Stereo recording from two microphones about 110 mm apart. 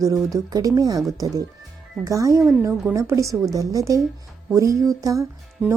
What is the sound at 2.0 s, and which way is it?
A woman's voice, 30° right (ahead or behind).